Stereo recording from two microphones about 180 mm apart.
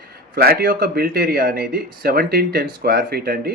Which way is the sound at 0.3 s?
60° right (ahead or behind).